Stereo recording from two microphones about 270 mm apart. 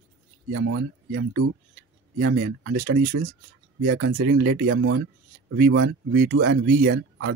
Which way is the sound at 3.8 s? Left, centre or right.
Right.